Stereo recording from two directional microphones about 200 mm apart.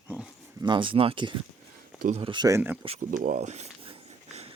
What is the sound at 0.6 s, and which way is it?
Speech, 25° right (ahead or behind).